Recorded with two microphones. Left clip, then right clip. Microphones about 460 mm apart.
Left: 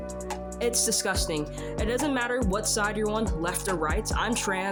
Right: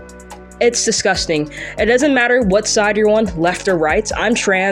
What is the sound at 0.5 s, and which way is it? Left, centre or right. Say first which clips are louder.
Speech: right 13 dB; left.